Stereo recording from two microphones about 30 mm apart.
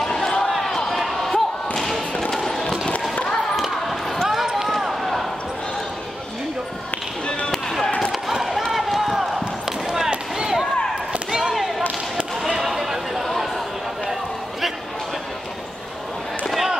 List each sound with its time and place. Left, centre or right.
0.0 s basketball bounce: centre
0.5 s basketball bounce: centre
1.8 s thump: centre
4.2 s run: centre
4.6 s basketball bounce: centre
8.1 s run: centre
8.9 s basketball bounce: centre
9.9 s a sound: centre
12.4 s a sound: centre